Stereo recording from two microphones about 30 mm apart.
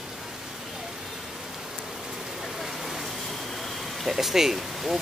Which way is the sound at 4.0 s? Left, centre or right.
Centre.